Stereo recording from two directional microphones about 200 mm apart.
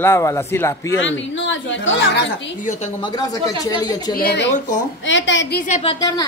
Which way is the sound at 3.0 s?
20° left (ahead or behind).